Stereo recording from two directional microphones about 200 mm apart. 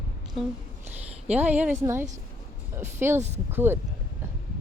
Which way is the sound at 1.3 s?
10° right (ahead or behind).